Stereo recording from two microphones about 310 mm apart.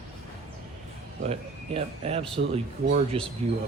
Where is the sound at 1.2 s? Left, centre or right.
Centre.